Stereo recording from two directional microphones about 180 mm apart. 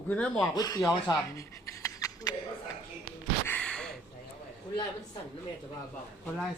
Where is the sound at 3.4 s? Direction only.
5° left (ahead or behind).